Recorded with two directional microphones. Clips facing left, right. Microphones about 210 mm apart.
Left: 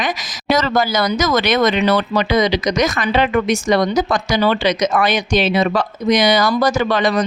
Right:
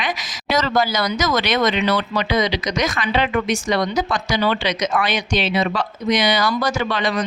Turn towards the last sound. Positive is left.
turn(degrees=40)  # may be behind; listen again after turning